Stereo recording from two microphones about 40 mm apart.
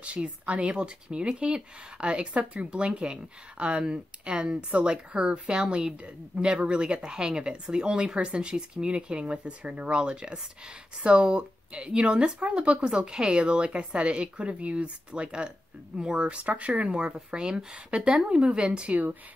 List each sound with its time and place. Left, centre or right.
0.0 s speech: right
16.9 s speech: right